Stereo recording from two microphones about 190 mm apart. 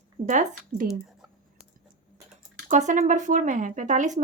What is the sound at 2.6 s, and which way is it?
Speech, 40° right (ahead or behind).